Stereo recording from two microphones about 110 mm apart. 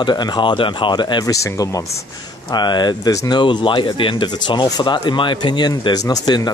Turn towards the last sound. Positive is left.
turn(degrees=40)  # may be behind; listen again after turning